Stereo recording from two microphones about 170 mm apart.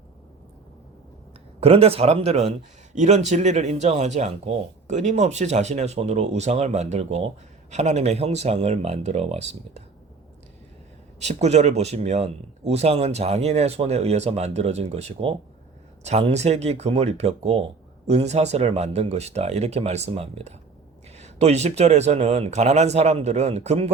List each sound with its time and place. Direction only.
1.6 s a man's voice: 35° right (ahead or behind)
11.2 s a man's voice: 40° right (ahead or behind)